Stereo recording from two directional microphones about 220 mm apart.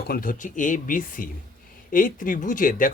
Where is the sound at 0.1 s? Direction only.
40° left (ahead or behind).